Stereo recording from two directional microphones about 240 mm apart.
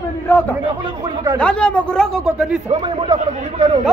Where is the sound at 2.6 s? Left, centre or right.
Right.